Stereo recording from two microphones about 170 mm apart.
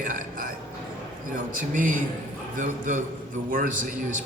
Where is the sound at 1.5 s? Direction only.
50° right (ahead or behind).